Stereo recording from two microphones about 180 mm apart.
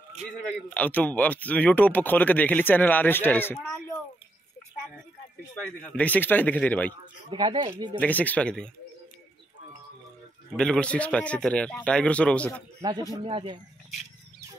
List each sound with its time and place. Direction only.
0.7 s speech: 10° left (ahead or behind)
5.5 s speech: 10° left (ahead or behind)
7.2 s speech: 25° right (ahead or behind)
8.0 s speech: 10° left (ahead or behind)
10.5 s speech: 5° left (ahead or behind)
13.1 s speech: 30° right (ahead or behind)